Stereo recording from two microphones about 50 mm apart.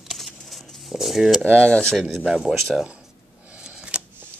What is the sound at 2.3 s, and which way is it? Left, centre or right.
Speech, centre.